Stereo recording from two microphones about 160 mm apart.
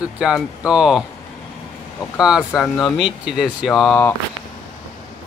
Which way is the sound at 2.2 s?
5° right (ahead or behind).